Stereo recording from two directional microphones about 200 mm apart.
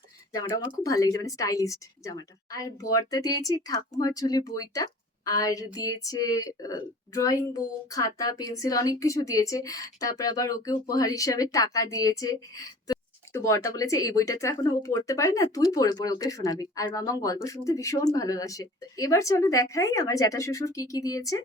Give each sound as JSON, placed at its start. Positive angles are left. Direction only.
{"t": 0.7, "sound": "speech", "side_deg": 15}